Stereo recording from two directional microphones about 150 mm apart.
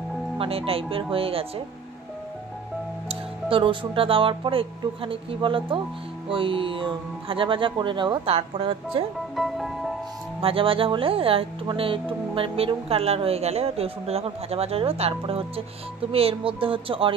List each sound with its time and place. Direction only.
0.4 s speech: 40° right (ahead or behind)
3.1 s speech: 35° right (ahead or behind)
9.3 s music: centre (ahead or behind)
10.4 s speech: 35° right (ahead or behind)